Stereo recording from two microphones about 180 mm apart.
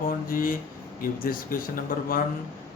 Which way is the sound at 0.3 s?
50° left (ahead or behind).